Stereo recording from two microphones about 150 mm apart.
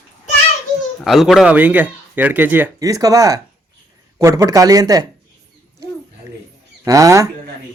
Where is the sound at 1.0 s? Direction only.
Centre (ahead or behind); by 5.0 s 25° right (ahead or behind).